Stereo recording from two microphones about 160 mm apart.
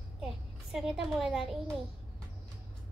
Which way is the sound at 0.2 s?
5° right (ahead or behind).